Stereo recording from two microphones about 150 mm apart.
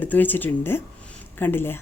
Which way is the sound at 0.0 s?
10° left (ahead or behind).